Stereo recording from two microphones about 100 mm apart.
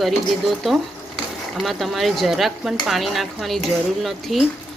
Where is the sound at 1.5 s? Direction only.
Centre (ahead or behind).